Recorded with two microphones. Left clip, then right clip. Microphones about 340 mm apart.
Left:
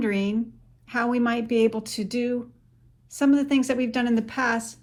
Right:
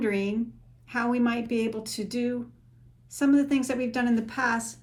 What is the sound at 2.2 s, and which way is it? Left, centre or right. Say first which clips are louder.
Speech: left 4 dB; left.